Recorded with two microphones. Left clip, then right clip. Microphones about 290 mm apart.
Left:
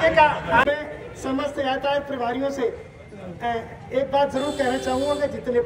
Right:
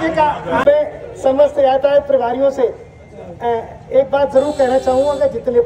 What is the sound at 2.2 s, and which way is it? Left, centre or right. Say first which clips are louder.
A woman's voice: right 10 dB; right.